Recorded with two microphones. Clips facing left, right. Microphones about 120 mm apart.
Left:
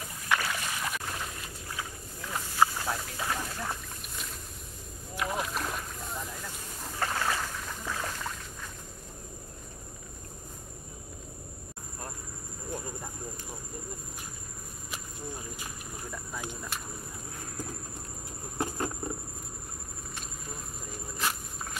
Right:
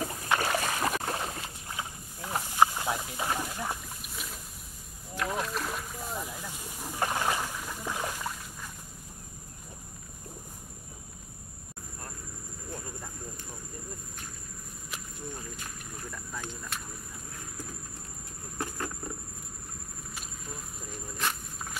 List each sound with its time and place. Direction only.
0.0 s boat: 45° right (ahead or behind)
1.4 s walk: 20° right (ahead or behind)
2.5 s boat: 15° right (ahead or behind)
14.9 s a sound: 5° left (ahead or behind)
18.6 s patter: 20° left (ahead or behind)
20.9 s cricket: centre (ahead or behind)